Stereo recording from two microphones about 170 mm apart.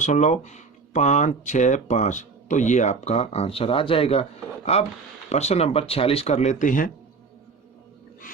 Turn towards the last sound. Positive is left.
turn(degrees=50)  # may be behind; listen again after turning